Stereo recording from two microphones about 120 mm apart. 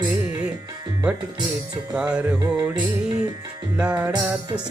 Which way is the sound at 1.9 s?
10° right (ahead or behind).